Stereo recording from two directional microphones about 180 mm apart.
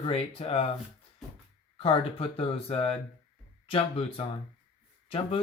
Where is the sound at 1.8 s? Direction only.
30° left (ahead or behind).